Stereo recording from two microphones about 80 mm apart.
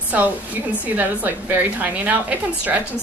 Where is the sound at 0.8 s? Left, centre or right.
Right.